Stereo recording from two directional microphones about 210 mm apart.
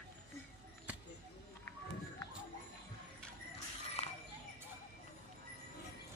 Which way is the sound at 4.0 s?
30° left (ahead or behind).